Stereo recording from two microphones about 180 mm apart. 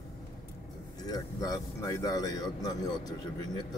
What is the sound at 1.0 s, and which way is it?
A man's voice, 20° left (ahead or behind).